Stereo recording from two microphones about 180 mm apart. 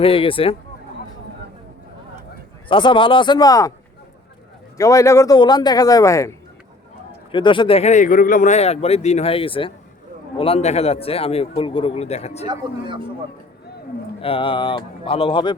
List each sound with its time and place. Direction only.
0.0 s a man's voice: 30° left (ahead or behind)
2.6 s speech: 30° left (ahead or behind)
4.8 s a man's voice: 20° left (ahead or behind); by 12.5 s 35° left (ahead or behind)
12.5 s speech: 25° right (ahead or behind)
14.2 s speech: 30° left (ahead or behind)